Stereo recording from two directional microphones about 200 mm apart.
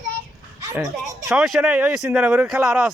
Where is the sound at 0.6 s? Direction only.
15° right (ahead or behind).